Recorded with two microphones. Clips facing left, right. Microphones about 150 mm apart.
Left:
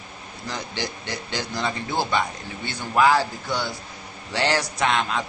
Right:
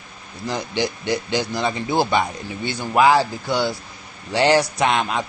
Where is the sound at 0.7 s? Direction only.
15° right (ahead or behind).